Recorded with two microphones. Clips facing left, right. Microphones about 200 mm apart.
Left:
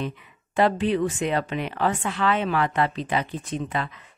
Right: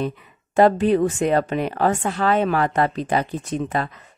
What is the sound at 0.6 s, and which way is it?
A woman's voice, 45° right (ahead or behind).